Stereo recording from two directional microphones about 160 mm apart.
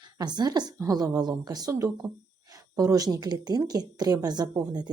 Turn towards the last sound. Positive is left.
turn(degrees=-25)  # may be behind; listen again after turning